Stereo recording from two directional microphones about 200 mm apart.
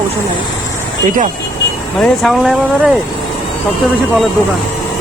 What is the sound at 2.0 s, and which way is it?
Speech, centre (ahead or behind).